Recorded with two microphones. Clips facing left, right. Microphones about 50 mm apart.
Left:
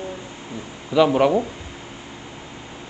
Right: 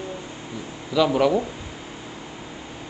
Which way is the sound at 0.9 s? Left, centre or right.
Left.